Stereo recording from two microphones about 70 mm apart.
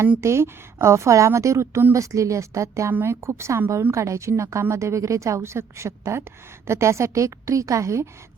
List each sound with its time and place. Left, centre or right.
0.2 s a woman's voice: right